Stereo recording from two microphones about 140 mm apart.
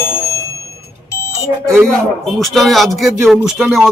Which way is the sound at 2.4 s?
Centre (ahead or behind).